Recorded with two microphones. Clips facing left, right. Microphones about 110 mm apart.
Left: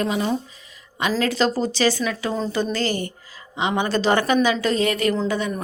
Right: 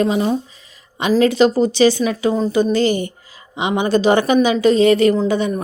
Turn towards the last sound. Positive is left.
turn(degrees=-20)  # may be behind; listen again after turning